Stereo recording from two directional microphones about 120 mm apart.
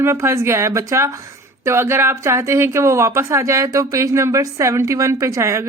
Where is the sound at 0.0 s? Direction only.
20° right (ahead or behind).